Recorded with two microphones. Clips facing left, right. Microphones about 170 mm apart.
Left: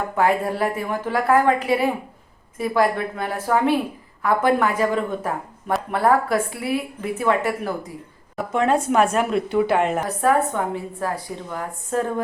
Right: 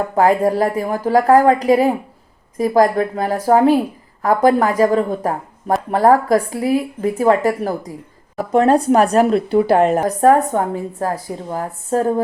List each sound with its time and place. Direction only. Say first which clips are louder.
0.2 s a woman's voice: right 6 dB; 40° right (ahead or behind)